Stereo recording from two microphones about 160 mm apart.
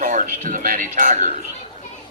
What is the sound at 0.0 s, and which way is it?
Speech, 55° right (ahead or behind).